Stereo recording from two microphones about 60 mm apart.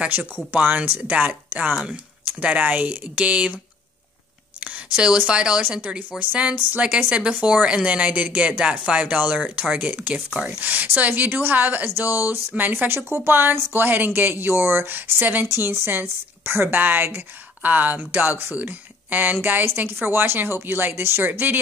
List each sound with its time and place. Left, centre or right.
0.5 s speech: right
4.6 s a woman's voice: centre